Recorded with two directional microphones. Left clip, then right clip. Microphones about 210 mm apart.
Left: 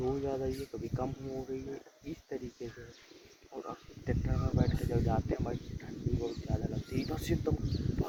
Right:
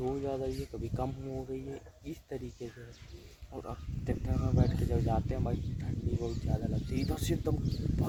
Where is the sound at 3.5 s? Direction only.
10° right (ahead or behind).